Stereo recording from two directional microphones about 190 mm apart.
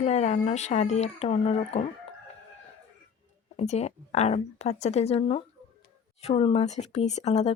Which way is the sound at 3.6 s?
35° left (ahead or behind).